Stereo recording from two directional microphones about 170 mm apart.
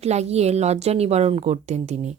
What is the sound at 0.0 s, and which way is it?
Speech, 40° right (ahead or behind).